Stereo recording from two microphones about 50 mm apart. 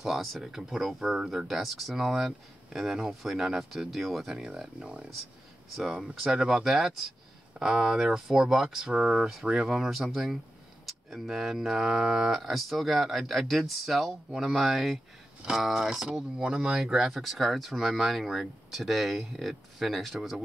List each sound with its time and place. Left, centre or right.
0.0 s speech: centre